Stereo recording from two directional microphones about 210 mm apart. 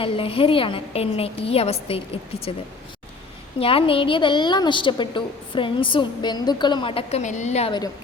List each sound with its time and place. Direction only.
0.0 s a woman's voice: 25° left (ahead or behind)
3.6 s a woman's voice: 25° left (ahead or behind)